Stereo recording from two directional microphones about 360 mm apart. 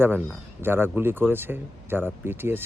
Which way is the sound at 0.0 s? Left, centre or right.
Centre.